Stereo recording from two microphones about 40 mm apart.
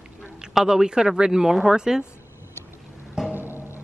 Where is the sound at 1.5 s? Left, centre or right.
Centre.